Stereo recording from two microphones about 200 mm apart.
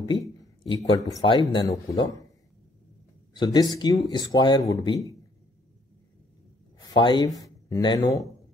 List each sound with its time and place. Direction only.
0.7 s speech: 20° left (ahead or behind)
3.3 s speech: 20° left (ahead or behind)
6.9 s speech: 20° left (ahead or behind)